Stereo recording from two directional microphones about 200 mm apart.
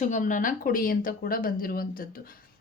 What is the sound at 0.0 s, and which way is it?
Speech, 40° left (ahead or behind).